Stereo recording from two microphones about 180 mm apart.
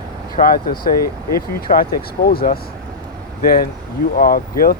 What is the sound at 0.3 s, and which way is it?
Speech, 55° left (ahead or behind).